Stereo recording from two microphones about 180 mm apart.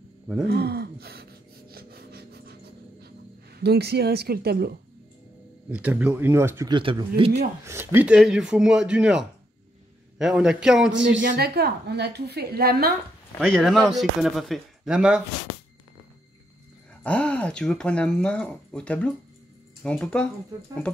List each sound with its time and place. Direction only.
0.5 s gasp: 60° right (ahead or behind)
3.5 s a woman's voice: 65° right (ahead or behind)
5.7 s speech: 10° right (ahead or behind)
6.7 s speech: 25° right (ahead or behind)
7.6 s speech: 15° right (ahead or behind)
10.9 s speech: 90° right
11.2 s a woman's voice: 60° right (ahead or behind)
13.5 s speech: centre (ahead or behind)
17.0 s speech: 5° left (ahead or behind)